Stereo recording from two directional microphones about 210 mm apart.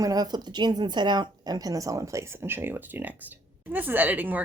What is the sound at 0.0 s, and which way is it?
A woman's voice, 20° right (ahead or behind).